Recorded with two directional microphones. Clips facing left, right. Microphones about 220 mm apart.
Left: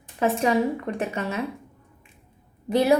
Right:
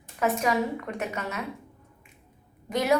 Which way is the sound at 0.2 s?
30° left (ahead or behind).